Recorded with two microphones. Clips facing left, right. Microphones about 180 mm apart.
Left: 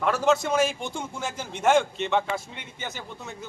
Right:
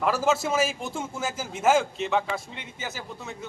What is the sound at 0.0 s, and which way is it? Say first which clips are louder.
A man's voice: left 1 dB; 5° right (ahead or behind).